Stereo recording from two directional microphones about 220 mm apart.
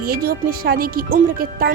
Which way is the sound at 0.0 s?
40° right (ahead or behind).